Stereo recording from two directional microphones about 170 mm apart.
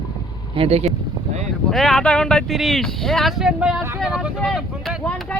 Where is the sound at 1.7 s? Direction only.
Centre (ahead or behind).